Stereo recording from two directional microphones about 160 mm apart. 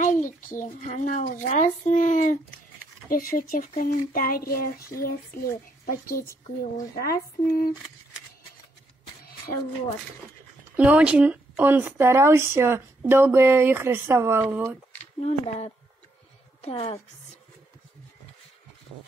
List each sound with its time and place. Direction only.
0.0 s speech: 55° left (ahead or behind); by 7.7 s 70° left (ahead or behind)
10.8 s speech: 10° right (ahead or behind)
15.2 s speech: 40° left (ahead or behind)